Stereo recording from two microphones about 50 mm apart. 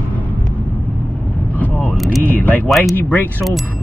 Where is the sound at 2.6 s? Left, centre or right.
Centre.